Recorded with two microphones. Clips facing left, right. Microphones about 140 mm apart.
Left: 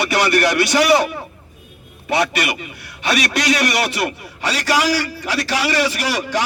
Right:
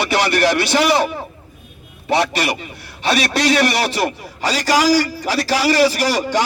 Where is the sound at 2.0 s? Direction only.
35° right (ahead or behind).